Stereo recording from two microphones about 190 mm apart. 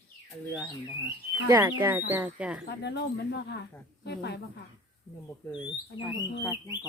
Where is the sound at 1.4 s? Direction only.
15° right (ahead or behind).